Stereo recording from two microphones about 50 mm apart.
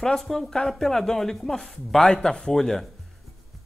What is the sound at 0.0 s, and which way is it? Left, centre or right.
Speech, centre.